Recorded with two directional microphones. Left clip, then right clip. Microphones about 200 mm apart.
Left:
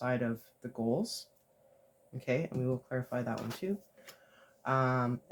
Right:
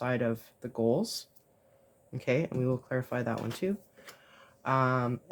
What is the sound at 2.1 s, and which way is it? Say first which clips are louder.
Speech: right 4 dB; 50° right (ahead or behind).